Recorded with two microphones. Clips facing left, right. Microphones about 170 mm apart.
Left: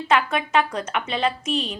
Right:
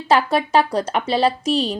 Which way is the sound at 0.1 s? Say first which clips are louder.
Right 4 dB; 35° right (ahead or behind).